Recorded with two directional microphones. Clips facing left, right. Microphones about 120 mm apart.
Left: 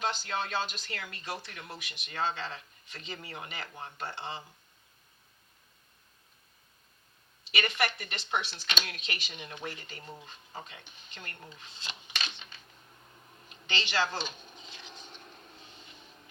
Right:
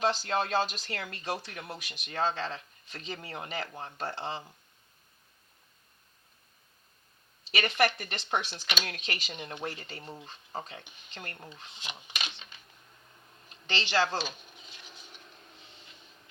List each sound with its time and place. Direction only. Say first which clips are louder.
0.0 s speech: right 5 dB; 35° right (ahead or behind)
7.5 s speech: right 4 dB; 35° right (ahead or behind)
11.8 s a sound: even; 15° right (ahead or behind)
13.7 s speech: right 3 dB; 35° right (ahead or behind)